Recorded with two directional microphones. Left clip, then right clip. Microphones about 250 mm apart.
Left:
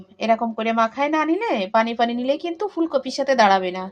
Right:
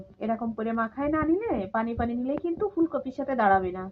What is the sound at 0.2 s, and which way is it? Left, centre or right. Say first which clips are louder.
Speech: left 10 dB; left.